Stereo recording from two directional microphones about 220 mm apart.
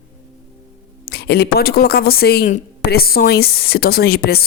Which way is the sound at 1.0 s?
45° left (ahead or behind).